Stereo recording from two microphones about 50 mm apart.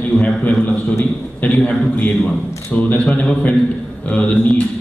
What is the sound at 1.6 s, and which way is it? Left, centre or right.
Mantra, left.